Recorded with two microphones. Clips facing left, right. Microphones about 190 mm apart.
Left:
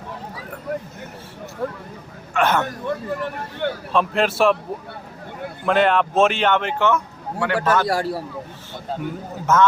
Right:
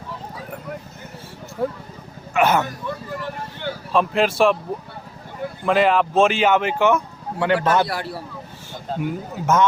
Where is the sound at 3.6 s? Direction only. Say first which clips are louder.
Left 5 dB; 60° left (ahead or behind).